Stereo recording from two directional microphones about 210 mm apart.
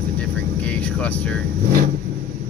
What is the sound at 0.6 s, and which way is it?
Speech, 5° left (ahead or behind).